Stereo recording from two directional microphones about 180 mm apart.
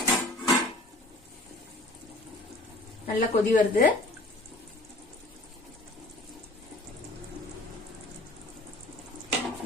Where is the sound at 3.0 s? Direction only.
45° left (ahead or behind).